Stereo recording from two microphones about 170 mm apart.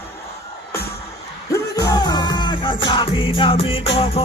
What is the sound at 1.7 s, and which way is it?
Music, 25° left (ahead or behind).